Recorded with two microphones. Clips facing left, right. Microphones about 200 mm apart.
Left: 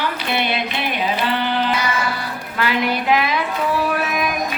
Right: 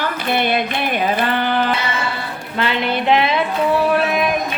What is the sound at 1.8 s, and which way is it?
Music, 25° right (ahead or behind).